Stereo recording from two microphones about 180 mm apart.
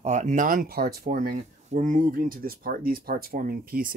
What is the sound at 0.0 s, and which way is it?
Speech, 40° right (ahead or behind).